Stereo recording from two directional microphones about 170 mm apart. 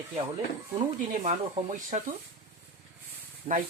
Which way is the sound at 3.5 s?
35° right (ahead or behind).